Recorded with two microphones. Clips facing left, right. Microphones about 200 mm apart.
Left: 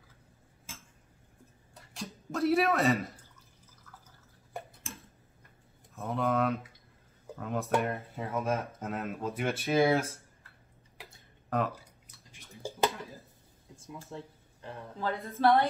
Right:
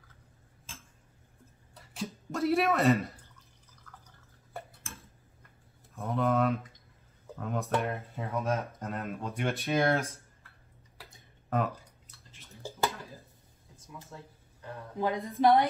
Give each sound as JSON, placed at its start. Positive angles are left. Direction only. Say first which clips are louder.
{"t": 1.8, "sound": "speech", "louder": "right 4 dB", "side_deg": 0}
{"t": 3.9, "sound": "drip", "louder": "right 1 dB", "side_deg": 5}
{"t": 5.9, "sound": "speech", "louder": "right 1 dB", "side_deg": 0}
{"t": 11.5, "sound": "speech", "louder": "even", "side_deg": 0}
{"t": 12.3, "sound": "a sound", "louder": "left 3 dB", "side_deg": 15}
{"t": 14.1, "sound": "speech", "louder": "left 6 dB", "side_deg": 25}
{"t": 15.0, "sound": "speech", "louder": "right 3 dB", "side_deg": -15}